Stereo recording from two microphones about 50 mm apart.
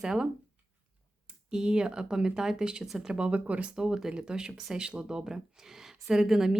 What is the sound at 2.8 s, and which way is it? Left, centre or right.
Speech, centre.